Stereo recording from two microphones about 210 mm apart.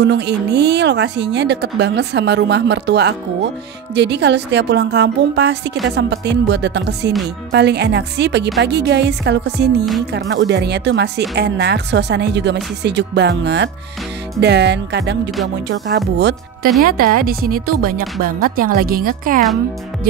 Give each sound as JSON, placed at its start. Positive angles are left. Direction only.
{"t": 0.0, "sound": "speech", "side_deg": -55}
{"t": 16.8, "sound": "speech", "side_deg": -45}